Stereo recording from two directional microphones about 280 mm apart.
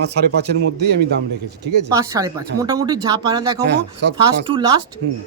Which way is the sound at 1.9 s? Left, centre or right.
Centre.